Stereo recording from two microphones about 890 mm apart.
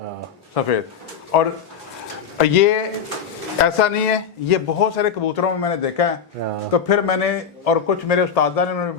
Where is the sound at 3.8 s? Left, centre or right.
Left.